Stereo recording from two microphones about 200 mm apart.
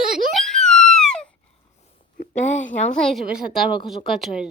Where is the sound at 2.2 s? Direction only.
40° left (ahead or behind).